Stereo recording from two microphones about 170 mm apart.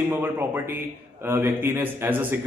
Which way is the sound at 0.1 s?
15° right (ahead or behind).